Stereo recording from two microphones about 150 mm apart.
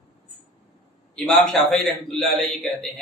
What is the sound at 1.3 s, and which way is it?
A man's voice, centre (ahead or behind).